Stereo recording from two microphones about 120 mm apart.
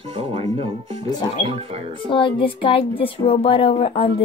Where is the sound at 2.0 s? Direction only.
45° left (ahead or behind).